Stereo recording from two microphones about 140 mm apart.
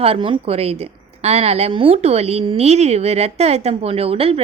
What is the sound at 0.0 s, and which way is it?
A woman's voice, 40° right (ahead or behind).